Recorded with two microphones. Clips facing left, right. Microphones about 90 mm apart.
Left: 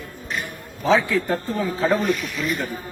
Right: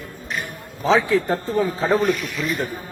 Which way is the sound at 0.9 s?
25° right (ahead or behind).